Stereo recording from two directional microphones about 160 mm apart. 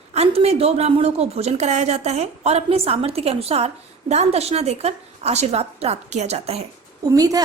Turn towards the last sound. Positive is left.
turn(degrees=-20)  # may be behind; listen again after turning